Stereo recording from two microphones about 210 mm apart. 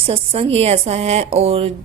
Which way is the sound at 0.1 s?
30° right (ahead or behind).